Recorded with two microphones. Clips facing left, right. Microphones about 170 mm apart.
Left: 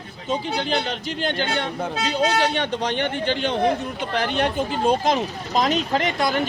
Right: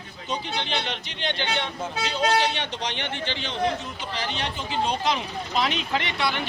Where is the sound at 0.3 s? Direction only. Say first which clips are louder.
Left 6 dB; 40° left (ahead or behind).